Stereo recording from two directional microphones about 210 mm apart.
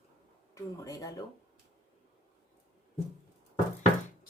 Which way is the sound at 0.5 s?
15° left (ahead or behind).